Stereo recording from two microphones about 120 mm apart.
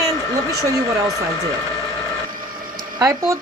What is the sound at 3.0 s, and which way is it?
Speech, 30° right (ahead or behind).